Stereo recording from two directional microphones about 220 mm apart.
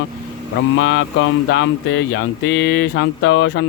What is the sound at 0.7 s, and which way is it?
Speech, 65° left (ahead or behind).